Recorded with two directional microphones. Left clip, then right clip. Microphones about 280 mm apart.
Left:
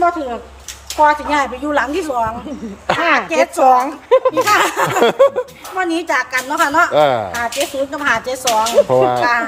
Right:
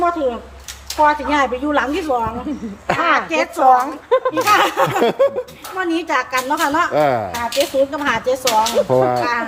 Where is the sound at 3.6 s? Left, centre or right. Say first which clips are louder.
Right 1 dB; left.